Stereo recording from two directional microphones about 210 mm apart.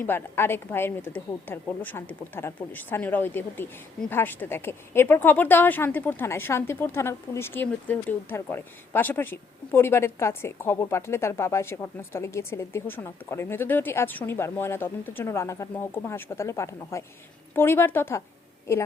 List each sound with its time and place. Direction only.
0.0 s speech: 10° left (ahead or behind)